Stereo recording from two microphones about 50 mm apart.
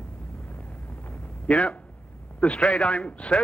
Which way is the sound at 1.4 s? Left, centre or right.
Left.